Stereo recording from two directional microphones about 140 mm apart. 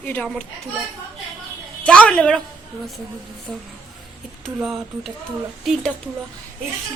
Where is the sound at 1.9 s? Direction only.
10° left (ahead or behind).